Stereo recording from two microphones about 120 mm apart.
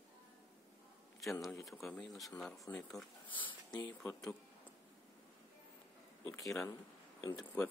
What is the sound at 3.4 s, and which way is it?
Speech, 40° left (ahead or behind).